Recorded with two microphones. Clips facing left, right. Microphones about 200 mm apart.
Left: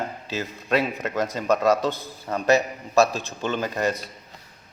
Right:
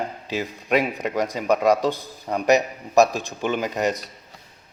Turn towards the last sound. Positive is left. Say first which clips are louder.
# right 2 dB
turn(degrees=-15)  # may be behind; listen again after turning